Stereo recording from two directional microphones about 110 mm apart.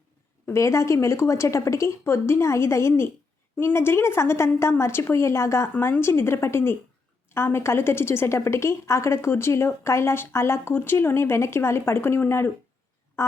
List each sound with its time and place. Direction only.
0.4 s a woman's voice: 25° left (ahead or behind)